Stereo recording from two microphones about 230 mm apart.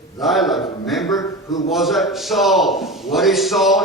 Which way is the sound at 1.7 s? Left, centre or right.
Centre.